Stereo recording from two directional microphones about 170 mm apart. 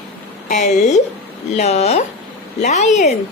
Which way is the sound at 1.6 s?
40° left (ahead or behind).